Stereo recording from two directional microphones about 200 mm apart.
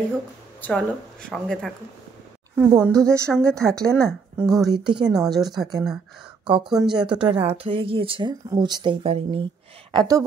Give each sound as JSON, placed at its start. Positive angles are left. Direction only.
{"t": 0.6, "sound": "speech", "side_deg": 5}
{"t": 2.5, "sound": "speech", "side_deg": -10}
{"t": 3.3, "sound": "speech", "side_deg": 5}
{"t": 3.7, "sound": "speech", "side_deg": -15}
{"t": 5.1, "sound": "speech", "side_deg": 0}
{"t": 6.8, "sound": "speech", "side_deg": -20}